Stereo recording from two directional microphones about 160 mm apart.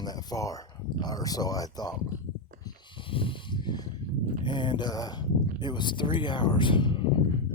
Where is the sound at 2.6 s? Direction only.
30° left (ahead or behind).